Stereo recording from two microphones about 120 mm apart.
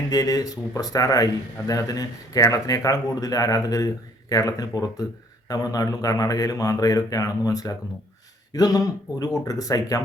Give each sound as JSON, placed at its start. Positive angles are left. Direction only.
{"t": 0.1, "sound": "a man's voice", "side_deg": 30}